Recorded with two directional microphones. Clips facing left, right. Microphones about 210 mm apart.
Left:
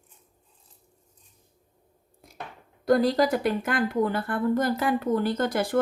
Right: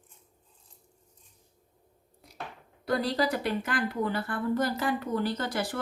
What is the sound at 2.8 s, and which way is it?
A woman's voice, 45° left (ahead or behind).